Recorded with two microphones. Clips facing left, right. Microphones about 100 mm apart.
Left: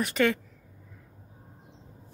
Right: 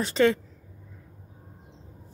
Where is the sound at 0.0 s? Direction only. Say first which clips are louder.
Right 3 dB; 30° right (ahead or behind).